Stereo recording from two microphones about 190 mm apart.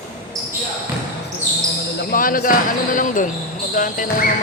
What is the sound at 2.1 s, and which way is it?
Speech, 50° left (ahead or behind).